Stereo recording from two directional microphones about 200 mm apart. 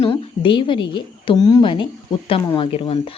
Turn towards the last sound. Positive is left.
turn(degrees=30)  # may be behind; listen again after turning